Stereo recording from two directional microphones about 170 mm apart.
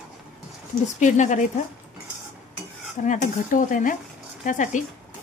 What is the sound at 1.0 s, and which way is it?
Speech, 45° left (ahead or behind).